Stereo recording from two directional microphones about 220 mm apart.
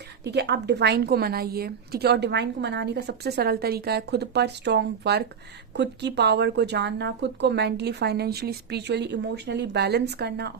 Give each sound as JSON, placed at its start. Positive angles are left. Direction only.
{"t": 0.3, "sound": "a woman's voice", "side_deg": -50}